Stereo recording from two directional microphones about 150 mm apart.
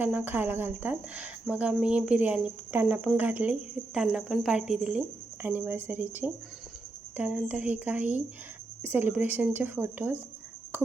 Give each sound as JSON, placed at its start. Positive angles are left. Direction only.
{"t": 0.0, "sound": "speech", "side_deg": -10}